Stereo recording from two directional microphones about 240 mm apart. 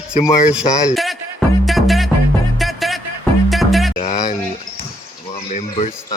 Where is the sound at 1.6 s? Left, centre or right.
Centre.